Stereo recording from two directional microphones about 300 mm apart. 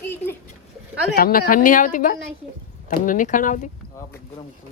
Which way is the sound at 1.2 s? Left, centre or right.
Left.